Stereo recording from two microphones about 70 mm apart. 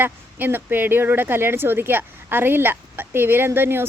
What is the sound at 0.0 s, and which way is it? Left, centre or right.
Speech, right.